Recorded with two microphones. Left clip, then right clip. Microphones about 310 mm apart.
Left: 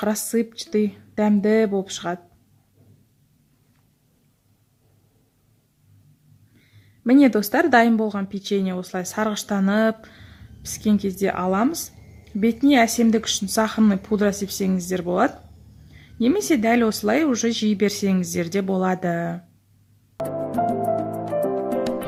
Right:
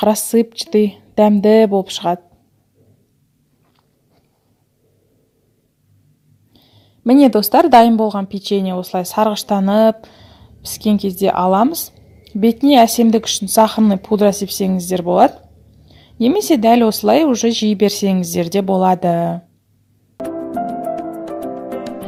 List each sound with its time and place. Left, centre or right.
0.0 s a woman's voice: centre
7.3 s a woman's voice: centre
15.9 s a sound: centre
16.3 s a woman's voice: centre
20.5 s music: centre